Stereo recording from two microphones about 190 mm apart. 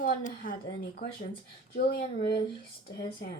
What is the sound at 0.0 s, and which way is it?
A woman's voice, 45° left (ahead or behind).